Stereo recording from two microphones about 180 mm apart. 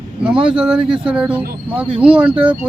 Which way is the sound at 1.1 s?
5° right (ahead or behind).